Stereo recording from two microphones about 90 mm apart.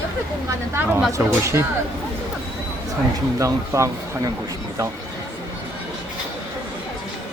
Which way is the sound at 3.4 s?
35° right (ahead or behind).